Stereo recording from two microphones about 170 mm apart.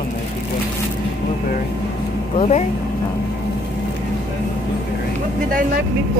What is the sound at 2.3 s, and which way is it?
Speech, 40° left (ahead or behind).